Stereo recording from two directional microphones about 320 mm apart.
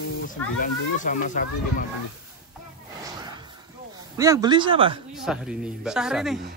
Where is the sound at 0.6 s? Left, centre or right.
Left.